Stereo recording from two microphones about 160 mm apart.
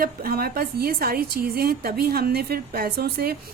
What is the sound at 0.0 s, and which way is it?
A woman's voice, 70° right (ahead or behind).